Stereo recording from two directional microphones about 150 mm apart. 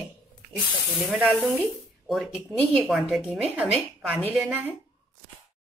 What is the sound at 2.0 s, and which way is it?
A woman's voice, 5° right (ahead or behind).